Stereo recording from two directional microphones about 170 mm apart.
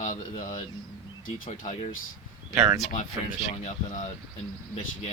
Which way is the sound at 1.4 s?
50° left (ahead or behind).